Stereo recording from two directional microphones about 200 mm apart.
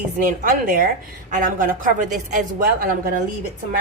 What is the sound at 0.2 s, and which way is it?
Speech, 45° right (ahead or behind).